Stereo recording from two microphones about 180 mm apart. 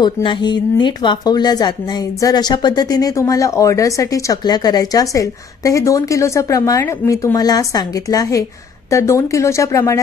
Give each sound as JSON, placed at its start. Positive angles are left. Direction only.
{"t": 0.0, "sound": "a woman's voice", "side_deg": 25}